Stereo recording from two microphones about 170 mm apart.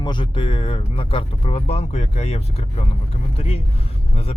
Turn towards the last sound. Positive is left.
turn(degrees=35)  # may be behind; listen again after turning